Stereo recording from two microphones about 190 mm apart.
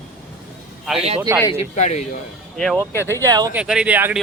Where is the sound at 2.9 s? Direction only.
15° left (ahead or behind).